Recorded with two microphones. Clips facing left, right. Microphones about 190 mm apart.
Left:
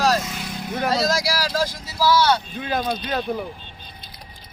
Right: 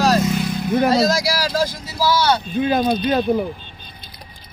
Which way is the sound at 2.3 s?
20° right (ahead or behind).